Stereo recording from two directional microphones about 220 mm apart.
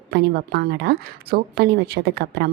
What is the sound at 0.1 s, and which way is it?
A woman's voice, 50° right (ahead or behind).